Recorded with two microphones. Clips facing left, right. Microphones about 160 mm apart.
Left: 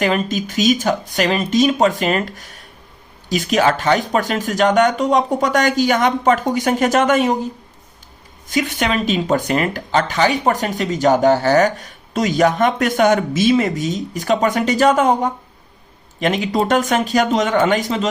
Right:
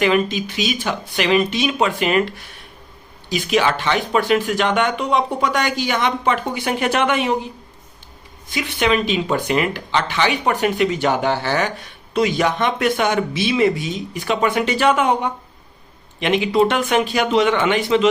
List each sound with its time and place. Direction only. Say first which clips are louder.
0.0 s speech: right 1 dB; 45° left (ahead or behind)